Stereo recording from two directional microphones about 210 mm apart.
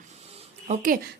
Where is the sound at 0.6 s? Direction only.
35° right (ahead or behind).